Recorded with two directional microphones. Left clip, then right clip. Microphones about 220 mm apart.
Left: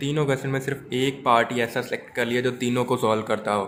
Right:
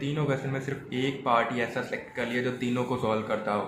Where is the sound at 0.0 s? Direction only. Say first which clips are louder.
Left 6 dB; 50° left (ahead or behind).